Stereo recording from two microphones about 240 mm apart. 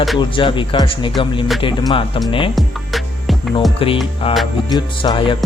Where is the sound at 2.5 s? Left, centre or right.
Centre.